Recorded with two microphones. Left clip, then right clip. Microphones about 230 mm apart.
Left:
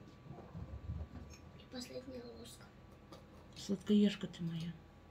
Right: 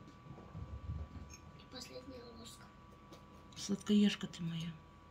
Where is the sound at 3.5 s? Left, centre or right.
Right.